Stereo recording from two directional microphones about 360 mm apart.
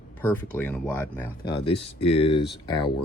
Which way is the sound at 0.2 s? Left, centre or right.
Centre.